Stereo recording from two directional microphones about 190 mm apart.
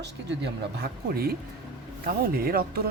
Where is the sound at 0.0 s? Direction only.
65° right (ahead or behind).